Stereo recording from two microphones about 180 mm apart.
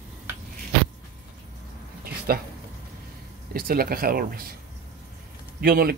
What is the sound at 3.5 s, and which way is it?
Speech, 55° right (ahead or behind).